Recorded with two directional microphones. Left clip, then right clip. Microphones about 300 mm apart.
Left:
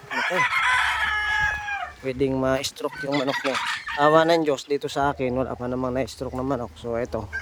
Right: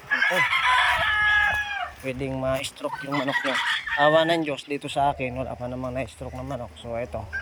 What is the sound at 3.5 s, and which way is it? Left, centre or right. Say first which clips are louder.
Fowl: right 2 dB; centre.